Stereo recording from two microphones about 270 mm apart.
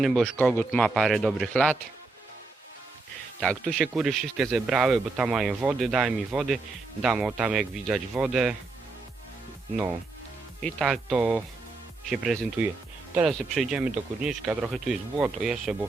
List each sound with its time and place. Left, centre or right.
0.0 s speech: centre
3.4 s speech: centre
10.6 s speech: centre